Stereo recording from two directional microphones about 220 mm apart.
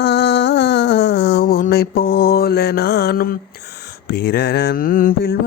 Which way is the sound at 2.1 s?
45° left (ahead or behind).